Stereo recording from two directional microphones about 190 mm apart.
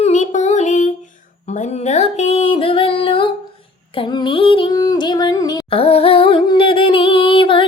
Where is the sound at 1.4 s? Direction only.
40° left (ahead or behind).